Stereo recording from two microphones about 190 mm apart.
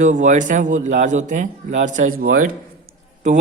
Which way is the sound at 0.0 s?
40° right (ahead or behind).